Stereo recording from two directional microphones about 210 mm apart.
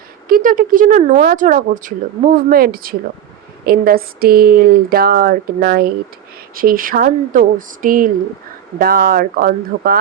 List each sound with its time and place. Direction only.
0.3 s speech: 45° right (ahead or behind)